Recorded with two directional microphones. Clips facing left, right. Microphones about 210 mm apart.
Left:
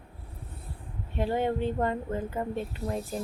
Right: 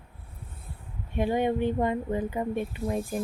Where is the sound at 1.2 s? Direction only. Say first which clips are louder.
Right 2 dB; 15° right (ahead or behind).